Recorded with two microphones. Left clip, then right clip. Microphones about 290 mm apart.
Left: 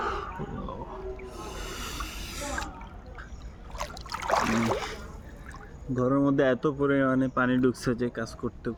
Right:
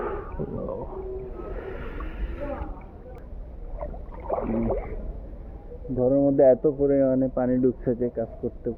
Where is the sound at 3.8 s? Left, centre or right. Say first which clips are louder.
Left 3 dB; left.